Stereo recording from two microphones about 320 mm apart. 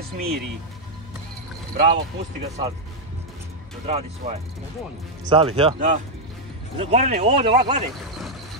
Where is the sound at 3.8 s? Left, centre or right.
Centre.